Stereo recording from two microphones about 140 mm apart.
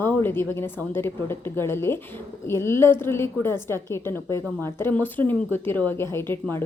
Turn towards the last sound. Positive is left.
turn(degrees=15)  # may be behind; listen again after turning